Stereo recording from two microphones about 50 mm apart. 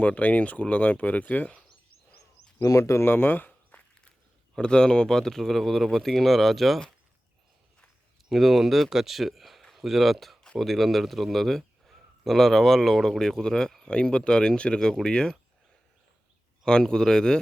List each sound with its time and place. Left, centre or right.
0.0 s speech: left
2.6 s speech: left
3.1 s a sound: left
4.5 s speech: centre
8.3 s a man's voice: centre
16.8 s speech: centre